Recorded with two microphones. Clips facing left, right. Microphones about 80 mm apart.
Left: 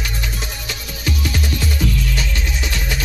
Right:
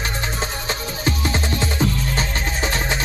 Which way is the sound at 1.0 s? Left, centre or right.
Right.